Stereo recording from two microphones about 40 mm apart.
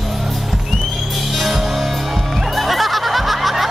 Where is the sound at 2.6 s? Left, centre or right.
Centre.